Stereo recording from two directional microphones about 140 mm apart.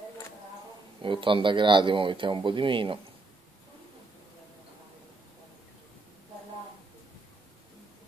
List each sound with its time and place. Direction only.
1.0 s speech: 35° right (ahead or behind)